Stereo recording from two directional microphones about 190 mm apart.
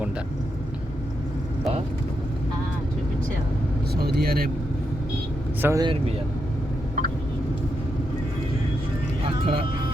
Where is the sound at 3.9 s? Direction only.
55° right (ahead or behind).